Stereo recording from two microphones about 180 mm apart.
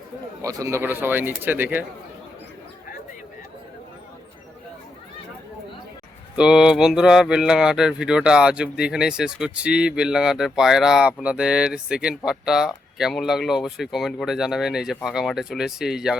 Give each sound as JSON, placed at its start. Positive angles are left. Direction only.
{"t": 0.4, "sound": "speech", "side_deg": -20}
{"t": 6.3, "sound": "speech", "side_deg": -5}